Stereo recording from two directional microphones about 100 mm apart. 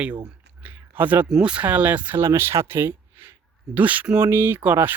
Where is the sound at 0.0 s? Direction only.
15° right (ahead or behind).